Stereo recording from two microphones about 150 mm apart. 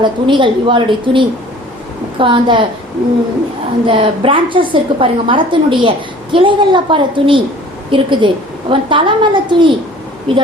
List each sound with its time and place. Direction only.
0.0 s a woman's voice: 30° right (ahead or behind)
3.8 s a woman's voice: 35° right (ahead or behind)